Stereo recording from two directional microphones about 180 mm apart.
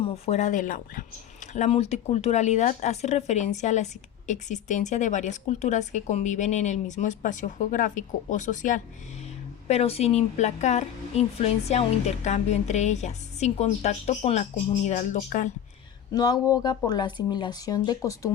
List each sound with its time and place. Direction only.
0.0 s a woman's voice: 35° left (ahead or behind)
16.1 s speech: 20° left (ahead or behind)